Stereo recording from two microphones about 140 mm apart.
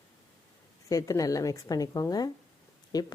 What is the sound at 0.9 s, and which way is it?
Speech, 25° left (ahead or behind).